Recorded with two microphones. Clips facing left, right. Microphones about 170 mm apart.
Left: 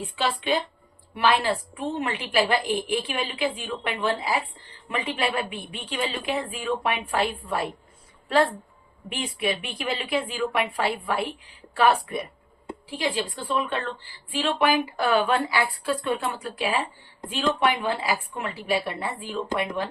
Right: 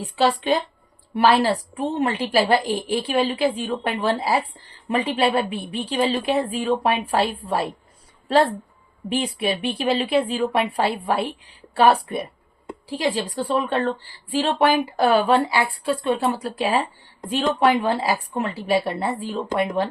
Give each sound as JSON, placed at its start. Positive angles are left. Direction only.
{"t": 0.2, "sound": "a woman's voice", "side_deg": -40}
{"t": 9.0, "sound": "a woman's voice", "side_deg": -35}